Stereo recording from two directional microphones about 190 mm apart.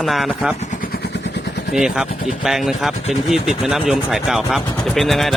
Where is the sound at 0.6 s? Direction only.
45° left (ahead or behind); by 1.6 s 65° left (ahead or behind).